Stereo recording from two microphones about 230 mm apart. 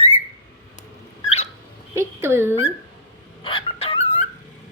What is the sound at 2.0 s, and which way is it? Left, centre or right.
Speech, centre.